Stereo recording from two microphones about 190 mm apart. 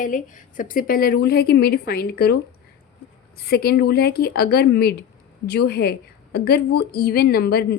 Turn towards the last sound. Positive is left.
turn(degrees=55)  # may be behind; listen again after turning